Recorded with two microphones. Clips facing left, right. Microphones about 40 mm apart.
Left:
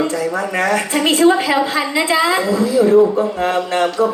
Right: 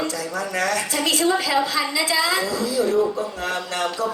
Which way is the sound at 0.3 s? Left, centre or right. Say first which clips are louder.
Left 4 dB; left.